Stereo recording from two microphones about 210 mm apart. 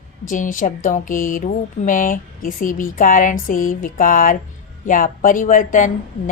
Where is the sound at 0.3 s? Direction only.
40° left (ahead or behind).